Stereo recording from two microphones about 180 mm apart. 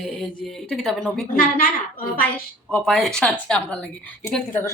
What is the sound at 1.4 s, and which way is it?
Speech, 50° left (ahead or behind).